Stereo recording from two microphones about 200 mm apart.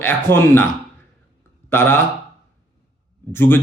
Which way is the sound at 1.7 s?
10° left (ahead or behind).